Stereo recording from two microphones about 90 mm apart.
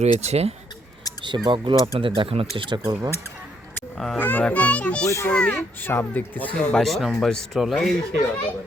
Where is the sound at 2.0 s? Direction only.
80° right.